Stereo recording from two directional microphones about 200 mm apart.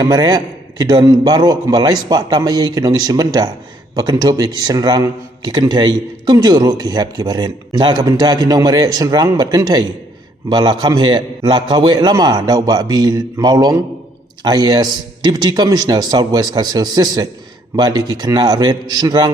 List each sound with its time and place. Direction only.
0.0 s speech: 20° right (ahead or behind)